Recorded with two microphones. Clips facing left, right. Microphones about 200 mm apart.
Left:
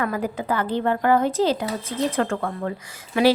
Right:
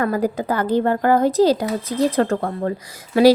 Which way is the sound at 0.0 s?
40° right (ahead or behind).